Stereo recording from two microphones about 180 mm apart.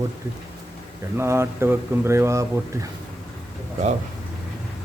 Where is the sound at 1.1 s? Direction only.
15° right (ahead or behind).